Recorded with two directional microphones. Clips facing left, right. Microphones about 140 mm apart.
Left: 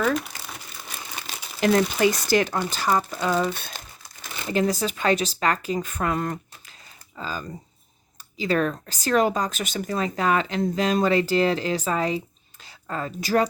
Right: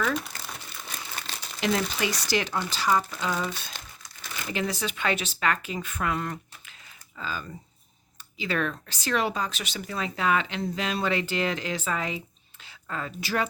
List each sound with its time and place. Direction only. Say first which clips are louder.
0.2 s crumpling: left 2 dB; 5° left (ahead or behind)
1.6 s speech: left 7 dB; 45° left (ahead or behind)
3.5 s speech: left 4 dB; 55° left (ahead or behind)
4.5 s speech: left 7 dB; 40° left (ahead or behind)